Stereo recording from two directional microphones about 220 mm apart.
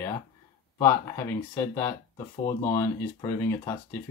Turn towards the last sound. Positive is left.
turn(degrees=15)  # may be behind; listen again after turning